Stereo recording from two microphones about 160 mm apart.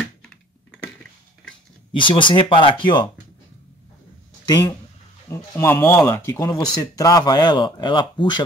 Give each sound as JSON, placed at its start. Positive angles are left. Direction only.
{"t": 0.0, "sound": "typing", "side_deg": 5}
{"t": 1.9, "sound": "speech", "side_deg": 30}
{"t": 4.5, "sound": "speech", "side_deg": 25}
{"t": 5.3, "sound": "speech", "side_deg": 15}